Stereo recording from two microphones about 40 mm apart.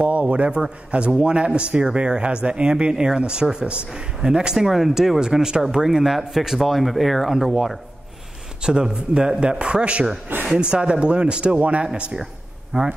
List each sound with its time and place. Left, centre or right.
0.0 s speech: right
4.6 s speech: centre
5.2 s speech: centre
8.6 s speech: centre